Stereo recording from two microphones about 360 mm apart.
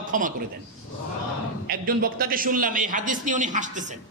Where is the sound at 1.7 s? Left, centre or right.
Right.